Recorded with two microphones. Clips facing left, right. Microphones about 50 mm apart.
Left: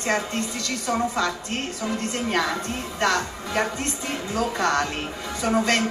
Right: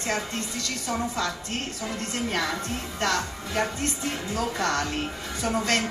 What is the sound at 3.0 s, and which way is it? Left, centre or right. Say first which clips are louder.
A woman's voice: left 4 dB; left.